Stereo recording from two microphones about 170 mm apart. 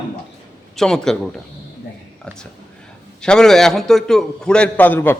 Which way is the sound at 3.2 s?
5° left (ahead or behind).